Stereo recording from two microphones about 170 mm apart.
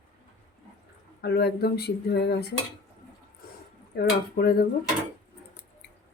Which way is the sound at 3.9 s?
65° left (ahead or behind).